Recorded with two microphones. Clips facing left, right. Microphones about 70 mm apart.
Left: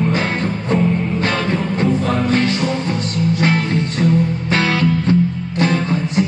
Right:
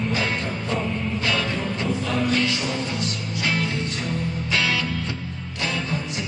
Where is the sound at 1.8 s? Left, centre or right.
Left.